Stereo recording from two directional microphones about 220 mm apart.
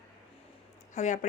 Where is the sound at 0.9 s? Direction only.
35° left (ahead or behind).